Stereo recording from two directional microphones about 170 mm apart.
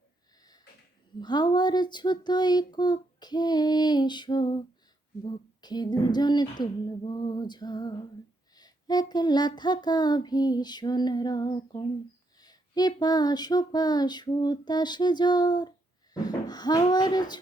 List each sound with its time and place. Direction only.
1.2 s speech: 25° left (ahead or behind)